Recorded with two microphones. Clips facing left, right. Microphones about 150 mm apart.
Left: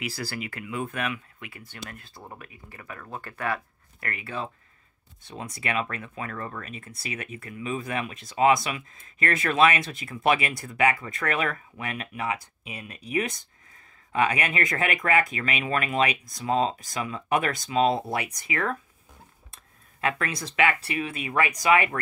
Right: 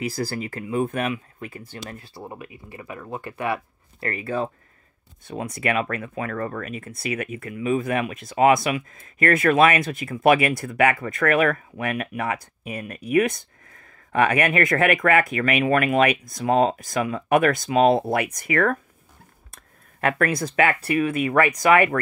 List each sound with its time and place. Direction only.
0.0 s speech: 45° right (ahead or behind)
2.0 s speech: 20° right (ahead or behind)
4.0 s speech: 40° right (ahead or behind); by 18.8 s 60° right (ahead or behind)
20.0 s speech: 50° right (ahead or behind)